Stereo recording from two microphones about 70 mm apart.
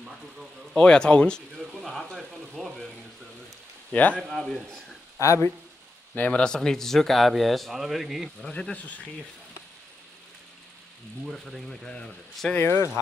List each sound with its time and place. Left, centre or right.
0.7 s speech: centre
1.6 s a sound: centre
3.9 s speech: left
4.2 s speech: centre
5.2 s speech: left
6.1 s speech: left
6.4 s speech: centre
8.5 s speech: centre
11.2 s speech: centre
12.5 s speech: left